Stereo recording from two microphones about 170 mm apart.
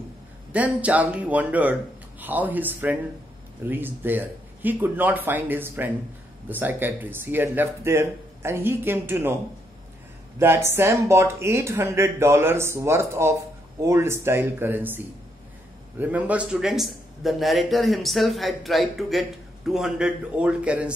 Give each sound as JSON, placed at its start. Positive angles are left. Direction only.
{"t": 0.5, "sound": "speech", "side_deg": -10}
{"t": 10.4, "sound": "speech", "side_deg": -15}
{"t": 16.0, "sound": "a man's voice", "side_deg": -10}